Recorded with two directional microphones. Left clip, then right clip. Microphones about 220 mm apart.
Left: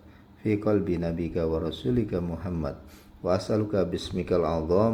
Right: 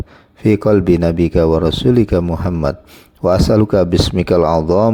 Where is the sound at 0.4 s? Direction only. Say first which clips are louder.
Right 13 dB; 50° right (ahead or behind).